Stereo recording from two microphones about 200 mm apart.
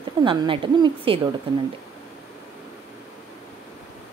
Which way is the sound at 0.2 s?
25° right (ahead or behind).